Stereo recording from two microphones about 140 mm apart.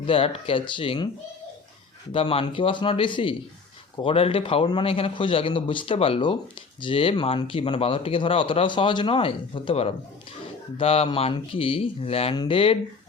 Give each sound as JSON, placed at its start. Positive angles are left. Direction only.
{"t": 0.0, "sound": "speech", "side_deg": 40}
{"t": 2.1, "sound": "speech", "side_deg": 40}